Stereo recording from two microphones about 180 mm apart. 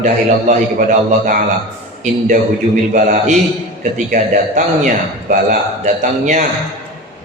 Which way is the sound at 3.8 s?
45° right (ahead or behind).